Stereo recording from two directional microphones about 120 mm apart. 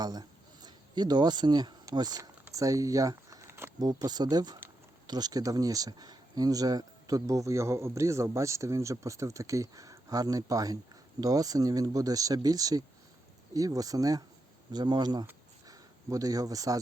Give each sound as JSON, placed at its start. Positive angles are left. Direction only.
{"t": 0.0, "sound": "speech", "side_deg": -35}
{"t": 3.8, "sound": "speech", "side_deg": -35}